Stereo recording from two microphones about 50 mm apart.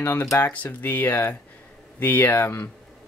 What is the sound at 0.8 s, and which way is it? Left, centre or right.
Speech, left.